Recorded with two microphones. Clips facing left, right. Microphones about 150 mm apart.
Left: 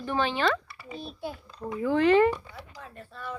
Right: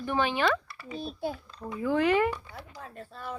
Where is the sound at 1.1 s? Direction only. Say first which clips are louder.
Right 4 dB; 40° right (ahead or behind).